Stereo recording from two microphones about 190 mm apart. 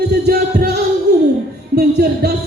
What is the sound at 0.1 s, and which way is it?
Music, 55° right (ahead or behind).